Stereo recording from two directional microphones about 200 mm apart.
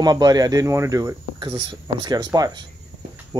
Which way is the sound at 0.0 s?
20° right (ahead or behind).